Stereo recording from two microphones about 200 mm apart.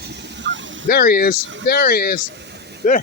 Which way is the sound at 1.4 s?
70° right (ahead or behind).